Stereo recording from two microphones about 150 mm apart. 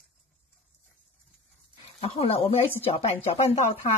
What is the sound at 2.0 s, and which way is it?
Speech, 40° left (ahead or behind).